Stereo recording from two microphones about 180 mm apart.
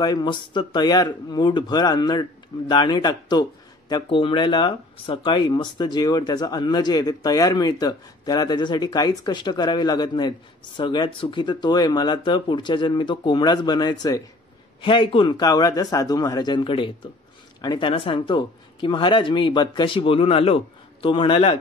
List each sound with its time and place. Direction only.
0.0 s speech: 25° left (ahead or behind)